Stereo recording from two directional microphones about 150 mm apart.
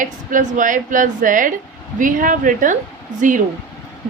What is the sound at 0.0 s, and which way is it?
A woman's voice, 60° right (ahead or behind).